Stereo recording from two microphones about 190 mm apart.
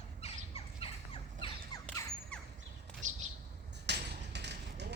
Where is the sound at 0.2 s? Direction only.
30° left (ahead or behind).